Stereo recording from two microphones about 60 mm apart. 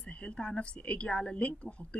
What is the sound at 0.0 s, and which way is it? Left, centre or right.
Speech, centre.